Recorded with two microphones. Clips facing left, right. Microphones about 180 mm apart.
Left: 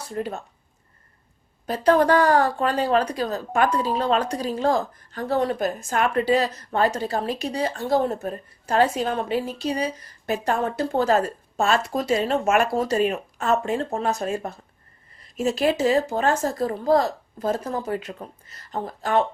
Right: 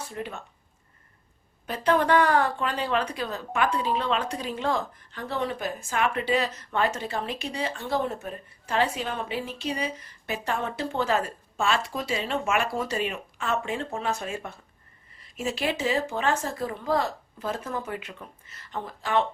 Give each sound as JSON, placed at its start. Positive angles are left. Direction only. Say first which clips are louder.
{"t": 0.0, "sound": "speech", "louder": "left 6 dB", "side_deg": 40}
{"t": 1.6, "sound": "speech", "louder": "left 5 dB", "side_deg": 40}